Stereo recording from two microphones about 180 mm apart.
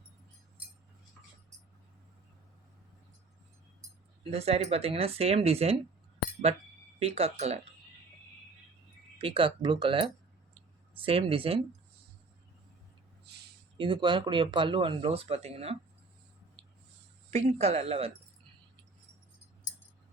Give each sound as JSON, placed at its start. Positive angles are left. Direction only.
{"t": 4.2, "sound": "speech", "side_deg": -35}
{"t": 7.0, "sound": "speech", "side_deg": -35}
{"t": 9.1, "sound": "speech", "side_deg": -30}
{"t": 13.7, "sound": "speech", "side_deg": -25}
{"t": 17.3, "sound": "speech", "side_deg": -35}